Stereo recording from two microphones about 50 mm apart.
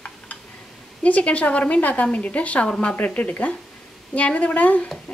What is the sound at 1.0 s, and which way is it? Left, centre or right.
A woman's voice, left.